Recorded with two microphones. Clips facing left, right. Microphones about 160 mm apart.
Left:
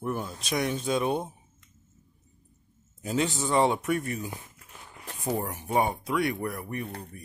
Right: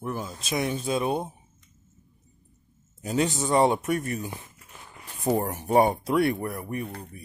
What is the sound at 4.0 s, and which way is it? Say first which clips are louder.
Speech: right 2 dB; 35° right (ahead or behind).